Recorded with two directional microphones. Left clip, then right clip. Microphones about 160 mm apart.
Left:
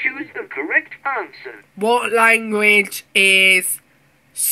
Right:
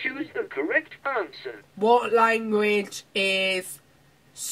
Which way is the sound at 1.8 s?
5° left (ahead or behind).